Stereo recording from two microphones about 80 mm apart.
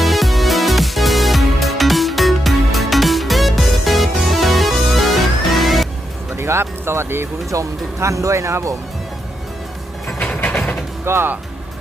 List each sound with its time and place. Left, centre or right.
0.0 s music: centre
6.3 s speech: right
10.2 s mechanisms: centre
11.0 s speech: right